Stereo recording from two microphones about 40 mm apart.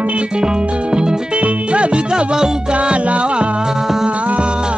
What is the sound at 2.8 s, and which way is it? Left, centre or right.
Music, right.